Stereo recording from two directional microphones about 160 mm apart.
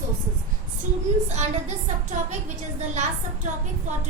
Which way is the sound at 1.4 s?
45° right (ahead or behind).